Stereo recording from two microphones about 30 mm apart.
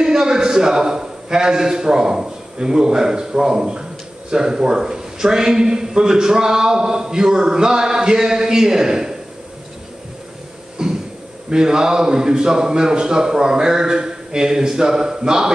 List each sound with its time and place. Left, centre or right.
0.0 s a man's voice: right
10.8 s a sound: right
11.5 s a man's voice: right